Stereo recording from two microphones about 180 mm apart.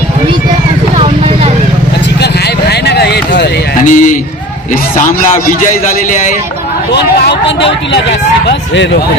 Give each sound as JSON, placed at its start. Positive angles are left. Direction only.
{"t": 0.9, "sound": "vehicle", "side_deg": -30}
{"t": 2.2, "sound": "a sound", "side_deg": 65}
{"t": 3.8, "sound": "a man's voice", "side_deg": 45}
{"t": 6.9, "sound": "speech", "side_deg": 70}